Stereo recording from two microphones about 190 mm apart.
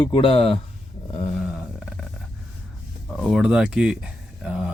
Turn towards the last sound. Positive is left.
turn(degrees=-5)  # may be behind; listen again after turning